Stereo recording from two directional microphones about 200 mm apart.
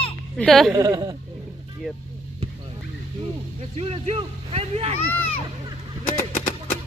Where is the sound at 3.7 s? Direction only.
30° right (ahead or behind).